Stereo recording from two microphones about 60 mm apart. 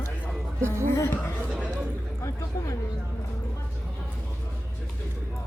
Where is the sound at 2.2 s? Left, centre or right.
Left.